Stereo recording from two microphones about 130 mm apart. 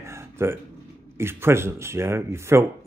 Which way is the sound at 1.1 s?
20° right (ahead or behind).